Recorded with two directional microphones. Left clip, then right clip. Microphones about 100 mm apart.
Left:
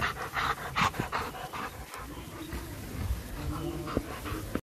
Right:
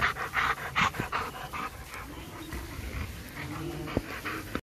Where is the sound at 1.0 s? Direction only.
50° left (ahead or behind).